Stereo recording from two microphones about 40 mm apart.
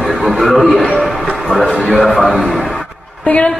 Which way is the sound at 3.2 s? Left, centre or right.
Left.